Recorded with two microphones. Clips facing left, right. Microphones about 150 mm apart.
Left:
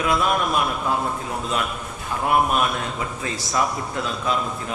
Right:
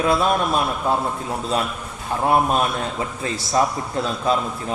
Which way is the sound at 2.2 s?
30° right (ahead or behind).